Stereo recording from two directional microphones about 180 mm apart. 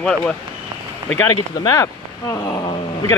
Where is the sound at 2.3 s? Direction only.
20° left (ahead or behind).